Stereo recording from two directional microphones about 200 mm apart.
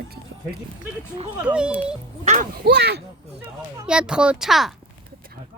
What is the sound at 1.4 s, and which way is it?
Speech, 5° right (ahead or behind).